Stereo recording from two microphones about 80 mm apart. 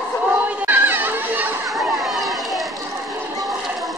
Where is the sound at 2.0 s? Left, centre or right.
Centre.